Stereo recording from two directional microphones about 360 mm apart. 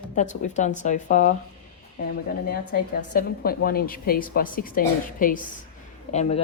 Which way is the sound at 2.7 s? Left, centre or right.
Left.